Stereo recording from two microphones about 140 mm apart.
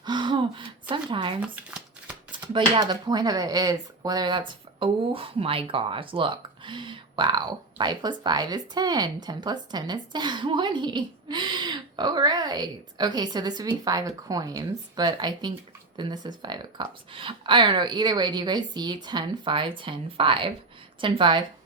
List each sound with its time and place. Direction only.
0.0 s gasp: 35° right (ahead or behind)
2.3 s speech: 35° right (ahead or behind)